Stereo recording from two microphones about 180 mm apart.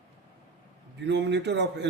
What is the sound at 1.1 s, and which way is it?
Speech, 75° right (ahead or behind).